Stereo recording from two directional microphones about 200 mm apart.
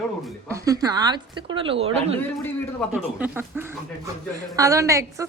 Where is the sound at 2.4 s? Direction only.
10° left (ahead or behind).